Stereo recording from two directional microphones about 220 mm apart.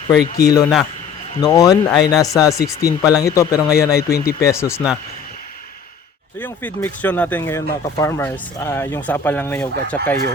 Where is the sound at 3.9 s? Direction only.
45° left (ahead or behind).